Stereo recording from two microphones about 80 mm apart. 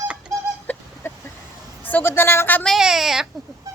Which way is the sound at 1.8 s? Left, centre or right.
Left.